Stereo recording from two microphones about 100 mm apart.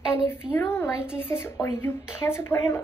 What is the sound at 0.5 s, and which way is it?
Speech, 25° left (ahead or behind).